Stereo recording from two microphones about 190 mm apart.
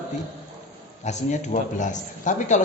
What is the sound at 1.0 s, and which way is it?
Speech, 40° left (ahead or behind).